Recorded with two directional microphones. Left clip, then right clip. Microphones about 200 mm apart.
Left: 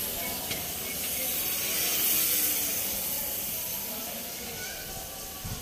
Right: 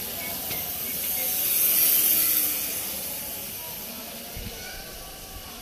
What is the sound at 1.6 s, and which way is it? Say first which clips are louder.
Electric toothbrush: right 1 dB; 50° right (ahead or behind).